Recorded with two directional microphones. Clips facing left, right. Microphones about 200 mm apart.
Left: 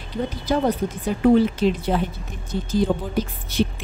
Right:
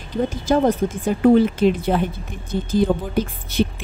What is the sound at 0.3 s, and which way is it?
Speech, 50° right (ahead or behind).